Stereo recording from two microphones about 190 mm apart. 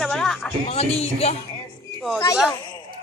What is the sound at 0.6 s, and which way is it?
Speech, 30° left (ahead or behind).